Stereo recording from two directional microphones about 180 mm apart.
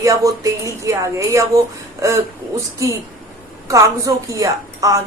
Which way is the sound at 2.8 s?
15° right (ahead or behind).